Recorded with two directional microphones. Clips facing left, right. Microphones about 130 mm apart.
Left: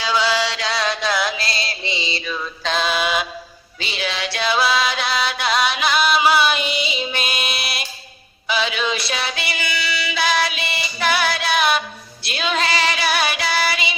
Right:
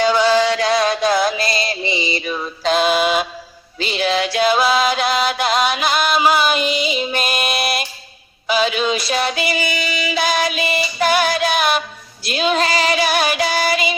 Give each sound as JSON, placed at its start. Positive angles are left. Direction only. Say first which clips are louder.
{"t": 0.3, "sound": "chant", "louder": "right 7 dB", "side_deg": -50}
{"t": 1.5, "sound": "music", "louder": "right 6 dB", "side_deg": -15}
{"t": 2.8, "sound": "mantra", "louder": "right 3 dB", "side_deg": -45}
{"t": 4.0, "sound": "music", "louder": "right 7 dB", "side_deg": -45}
{"t": 6.6, "sound": "music", "louder": "right 5 dB", "side_deg": 0}
{"t": 7.1, "sound": "music", "louder": "right 5 dB", "side_deg": -45}
{"t": 8.4, "sound": "a sound", "louder": "right 4 dB", "side_deg": -45}
{"t": 12.2, "sound": "music", "louder": "right 5 dB", "side_deg": -45}